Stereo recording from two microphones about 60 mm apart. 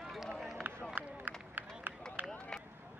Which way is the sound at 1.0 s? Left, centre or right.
Right.